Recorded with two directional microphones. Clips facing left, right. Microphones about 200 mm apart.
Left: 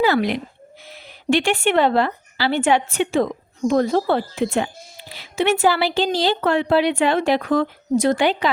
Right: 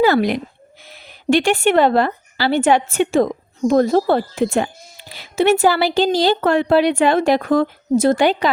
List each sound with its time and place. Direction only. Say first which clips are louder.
0.0 s a woman's voice: right 3 dB; 45° right (ahead or behind)